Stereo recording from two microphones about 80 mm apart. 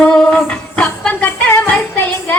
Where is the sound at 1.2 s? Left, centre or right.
Left.